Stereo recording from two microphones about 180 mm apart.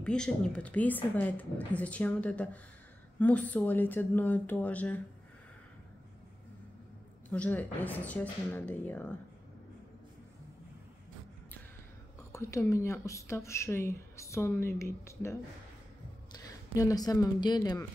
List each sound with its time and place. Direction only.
0.0 s speech: 5° left (ahead or behind)
7.2 s speech: 10° left (ahead or behind)
12.3 s speech: 15° left (ahead or behind)